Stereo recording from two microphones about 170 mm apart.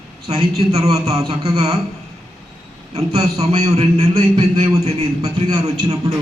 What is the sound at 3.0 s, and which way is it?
A man's voice, 35° right (ahead or behind).